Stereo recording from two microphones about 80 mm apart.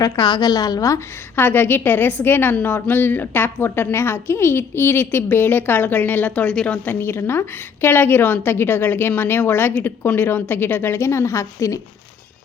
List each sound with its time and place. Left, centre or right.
0.2 s a woman's voice: left
1.4 s a woman's voice: left
7.0 s a woman's voice: left